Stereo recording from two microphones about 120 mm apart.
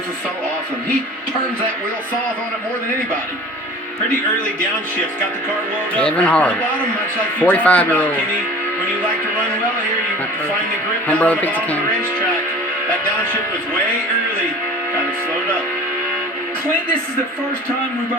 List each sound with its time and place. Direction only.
5.9 s speech: 10° left (ahead or behind)
11.1 s speech: 15° left (ahead or behind)